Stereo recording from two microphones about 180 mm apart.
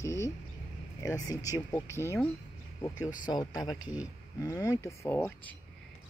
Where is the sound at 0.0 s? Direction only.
15° left (ahead or behind).